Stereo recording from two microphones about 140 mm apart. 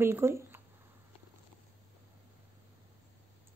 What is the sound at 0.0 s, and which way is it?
Speech, 15° right (ahead or behind).